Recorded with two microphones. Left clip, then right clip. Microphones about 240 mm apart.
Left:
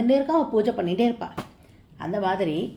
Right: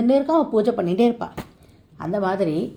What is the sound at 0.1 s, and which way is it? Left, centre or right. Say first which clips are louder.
A woman's voice: right 3 dB; right.